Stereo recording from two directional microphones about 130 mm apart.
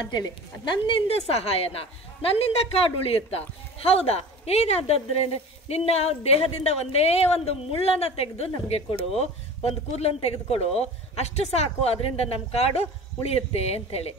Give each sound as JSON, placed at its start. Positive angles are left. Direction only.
{"t": 0.1, "sound": "a woman's voice", "side_deg": 35}